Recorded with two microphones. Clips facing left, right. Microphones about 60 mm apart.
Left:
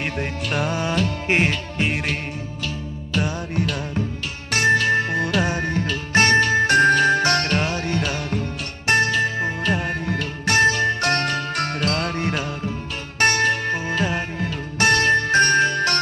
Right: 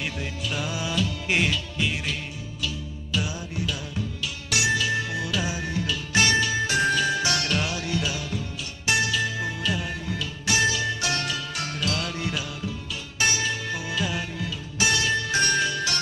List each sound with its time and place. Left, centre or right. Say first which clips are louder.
0.0 s music: left 5 dB; left